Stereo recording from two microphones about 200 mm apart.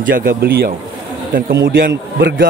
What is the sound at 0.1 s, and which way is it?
A man's voice, 45° right (ahead or behind).